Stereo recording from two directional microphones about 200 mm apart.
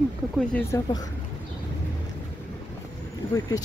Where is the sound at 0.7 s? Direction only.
15° left (ahead or behind).